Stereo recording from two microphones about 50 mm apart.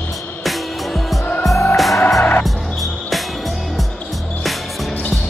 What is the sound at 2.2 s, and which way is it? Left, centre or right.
Music, left.